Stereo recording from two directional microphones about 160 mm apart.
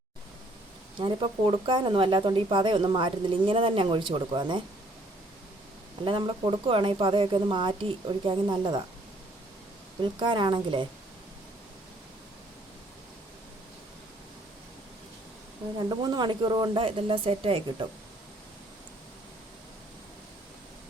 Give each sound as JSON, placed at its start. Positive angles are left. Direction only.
{"t": 0.9, "sound": "speech", "side_deg": -30}
{"t": 6.1, "sound": "speech", "side_deg": -30}
{"t": 10.0, "sound": "speech", "side_deg": -30}
{"t": 15.8, "sound": "speech", "side_deg": -25}